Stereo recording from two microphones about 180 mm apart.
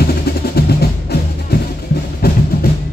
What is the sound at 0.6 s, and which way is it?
Music, 60° left (ahead or behind).